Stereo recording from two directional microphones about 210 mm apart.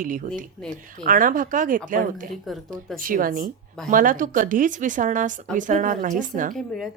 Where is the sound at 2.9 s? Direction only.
40° right (ahead or behind).